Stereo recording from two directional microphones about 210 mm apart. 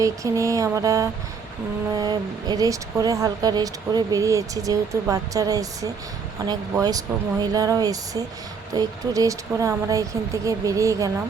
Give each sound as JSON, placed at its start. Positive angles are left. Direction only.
{"t": 0.0, "sound": "speech", "side_deg": -15}